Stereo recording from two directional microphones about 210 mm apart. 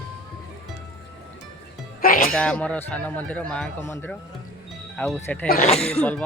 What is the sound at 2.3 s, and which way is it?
Speech, 5° left (ahead or behind).